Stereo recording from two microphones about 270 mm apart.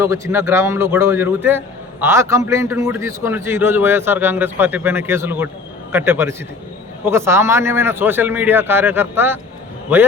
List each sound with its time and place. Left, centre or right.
0.0 s a man's voice: centre